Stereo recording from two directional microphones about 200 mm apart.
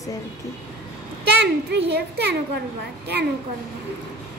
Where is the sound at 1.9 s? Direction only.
55° right (ahead or behind).